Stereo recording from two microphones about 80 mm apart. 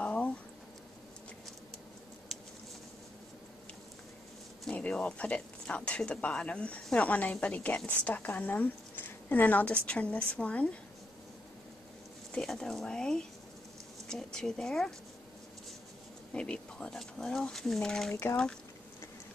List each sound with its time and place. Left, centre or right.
0.0 s a sound: centre
4.6 s speech: centre
12.3 s speech: centre
16.3 s speech: centre